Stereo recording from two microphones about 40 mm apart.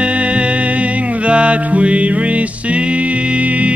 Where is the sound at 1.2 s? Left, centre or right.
Right.